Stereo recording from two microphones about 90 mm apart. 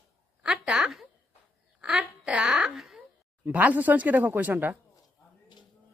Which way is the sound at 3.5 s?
20° right (ahead or behind).